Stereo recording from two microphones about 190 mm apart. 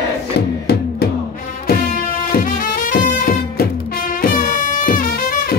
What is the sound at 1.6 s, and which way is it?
Music, 50° left (ahead or behind).